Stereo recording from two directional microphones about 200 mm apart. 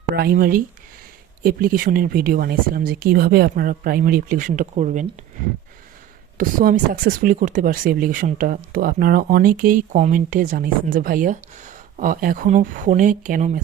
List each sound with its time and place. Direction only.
0.2 s speech: 45° right (ahead or behind)
6.3 s speech: 45° right (ahead or behind)